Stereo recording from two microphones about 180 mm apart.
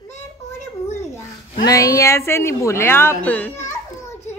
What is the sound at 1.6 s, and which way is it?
A woman's voice, 15° left (ahead or behind).